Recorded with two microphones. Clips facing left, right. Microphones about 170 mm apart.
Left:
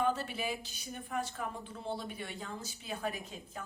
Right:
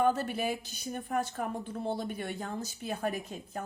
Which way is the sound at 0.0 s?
50° right (ahead or behind).